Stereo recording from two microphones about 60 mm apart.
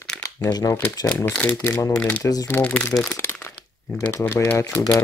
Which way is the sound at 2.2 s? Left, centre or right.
Left.